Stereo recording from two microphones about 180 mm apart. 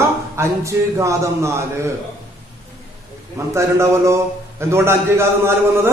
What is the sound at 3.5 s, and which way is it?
A man's voice, 15° right (ahead or behind).